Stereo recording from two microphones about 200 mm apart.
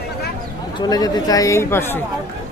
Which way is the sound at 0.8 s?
20° left (ahead or behind).